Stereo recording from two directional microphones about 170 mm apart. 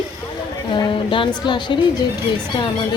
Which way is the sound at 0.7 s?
30° left (ahead or behind).